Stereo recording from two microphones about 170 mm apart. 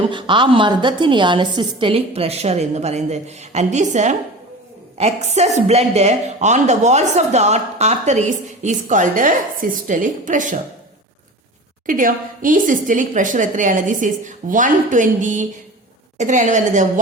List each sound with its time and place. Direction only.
0.1 s a woman's voice: 30° right (ahead or behind); by 10.6 s 50° right (ahead or behind)
11.9 s a woman's voice: 50° right (ahead or behind)